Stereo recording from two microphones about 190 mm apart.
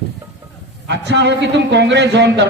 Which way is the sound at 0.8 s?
65° right (ahead or behind).